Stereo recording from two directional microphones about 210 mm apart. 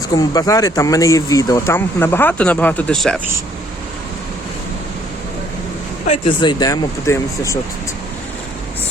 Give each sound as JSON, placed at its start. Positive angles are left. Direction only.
{"t": 0.1, "sound": "speech", "side_deg": 15}
{"t": 6.1, "sound": "speech", "side_deg": 25}